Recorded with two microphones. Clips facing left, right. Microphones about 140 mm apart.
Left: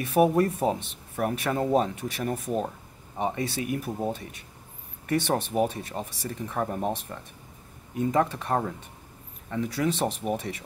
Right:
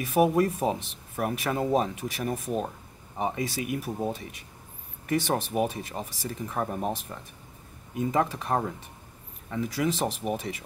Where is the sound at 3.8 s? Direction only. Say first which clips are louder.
Left 1 dB; 15° left (ahead or behind).